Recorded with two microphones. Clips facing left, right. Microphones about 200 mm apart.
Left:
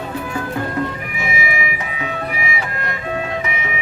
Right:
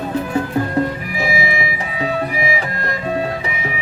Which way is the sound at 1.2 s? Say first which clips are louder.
Right 3 dB; 30° right (ahead or behind).